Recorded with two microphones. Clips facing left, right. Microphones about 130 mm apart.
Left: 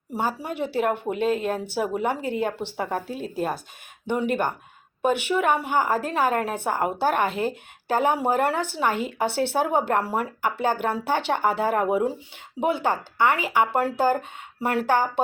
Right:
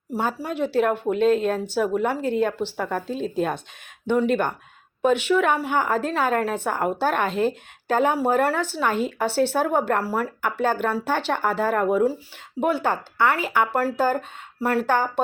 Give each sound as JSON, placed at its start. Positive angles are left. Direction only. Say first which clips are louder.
{"t": 0.1, "sound": "a woman's voice", "louder": "right 1 dB", "side_deg": 10}